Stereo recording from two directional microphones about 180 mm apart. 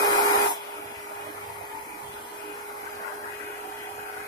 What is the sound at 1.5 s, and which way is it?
Vacuum cleaner, 20° left (ahead or behind).